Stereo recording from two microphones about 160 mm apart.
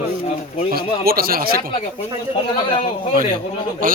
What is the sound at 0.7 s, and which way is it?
Speech, 70° right (ahead or behind).